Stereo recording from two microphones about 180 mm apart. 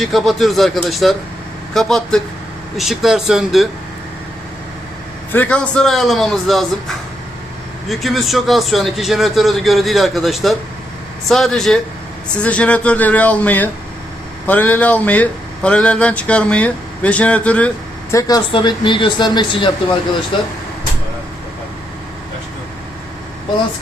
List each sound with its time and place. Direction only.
0.0 s a man's voice: centre (ahead or behind)
5.3 s a man's voice: 10° left (ahead or behind)
18.1 s a woman's voice: 20° left (ahead or behind)